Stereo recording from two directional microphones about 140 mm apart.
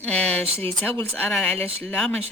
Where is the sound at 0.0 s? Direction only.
10° left (ahead or behind).